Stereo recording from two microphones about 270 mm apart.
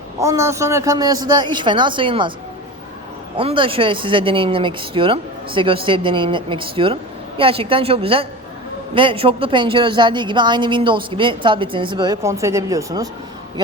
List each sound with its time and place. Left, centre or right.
0.2 s speech: centre
3.3 s speech: centre